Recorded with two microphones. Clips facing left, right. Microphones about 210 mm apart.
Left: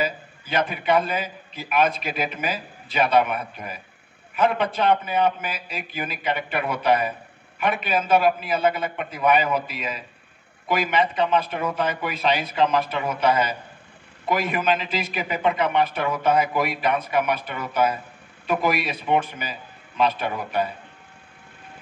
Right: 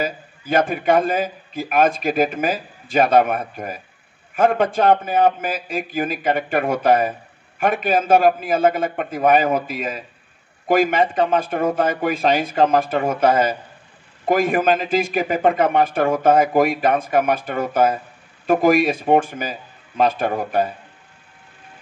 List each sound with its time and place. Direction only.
0.0 s a man's voice: 50° right (ahead or behind)